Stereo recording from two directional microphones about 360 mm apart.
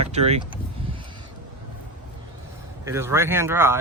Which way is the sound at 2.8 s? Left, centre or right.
Centre.